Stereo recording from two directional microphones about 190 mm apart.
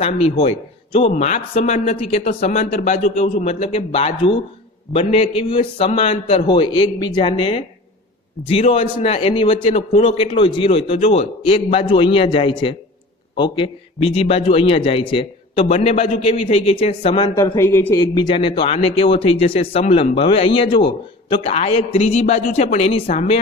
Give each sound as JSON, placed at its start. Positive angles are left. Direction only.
{"t": 0.0, "sound": "a man's voice", "side_deg": 30}
{"t": 17.4, "sound": "speech", "side_deg": 15}